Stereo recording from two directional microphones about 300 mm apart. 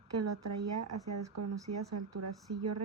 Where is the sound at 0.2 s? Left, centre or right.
Right.